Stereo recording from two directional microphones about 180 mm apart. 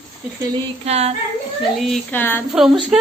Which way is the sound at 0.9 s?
35° right (ahead or behind).